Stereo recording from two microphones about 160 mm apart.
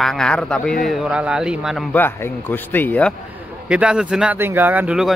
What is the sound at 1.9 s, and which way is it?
Speech, 15° left (ahead or behind).